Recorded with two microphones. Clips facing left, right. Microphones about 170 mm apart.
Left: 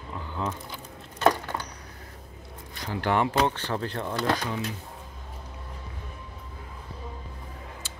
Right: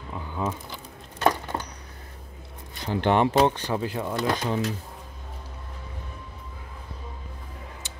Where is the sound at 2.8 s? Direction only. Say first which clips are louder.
Right 4 dB; 25° right (ahead or behind); by 4.2 s 10° right (ahead or behind).